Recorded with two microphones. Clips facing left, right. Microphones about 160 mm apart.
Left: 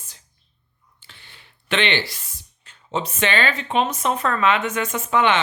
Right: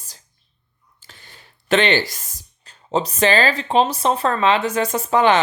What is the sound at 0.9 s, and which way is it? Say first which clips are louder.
Speech: right 3 dB; 40° right (ahead or behind).